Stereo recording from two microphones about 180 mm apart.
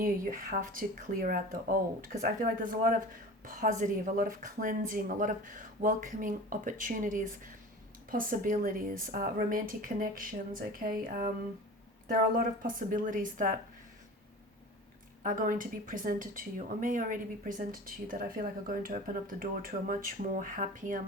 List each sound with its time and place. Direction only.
0.0 s speech: 50° right (ahead or behind)
12.0 s speech: 50° right (ahead or behind)
15.2 s speech: 50° right (ahead or behind)